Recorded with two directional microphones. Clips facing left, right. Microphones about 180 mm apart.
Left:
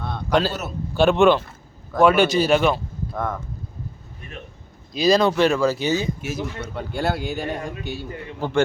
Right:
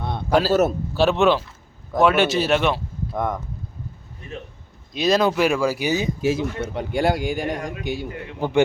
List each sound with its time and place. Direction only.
0.3 s speech: 5° right (ahead or behind)
3.2 s a man's voice: 15° right (ahead or behind)
4.9 s a man's voice: centre (ahead or behind)